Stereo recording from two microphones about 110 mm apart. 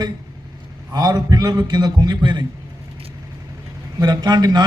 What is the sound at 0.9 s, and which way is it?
A man's voice, 35° right (ahead or behind).